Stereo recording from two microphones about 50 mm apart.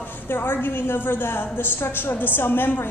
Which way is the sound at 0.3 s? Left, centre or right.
Left.